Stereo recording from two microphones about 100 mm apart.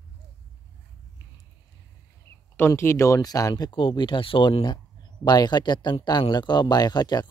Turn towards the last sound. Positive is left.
turn(degrees=45)  # may be behind; listen again after turning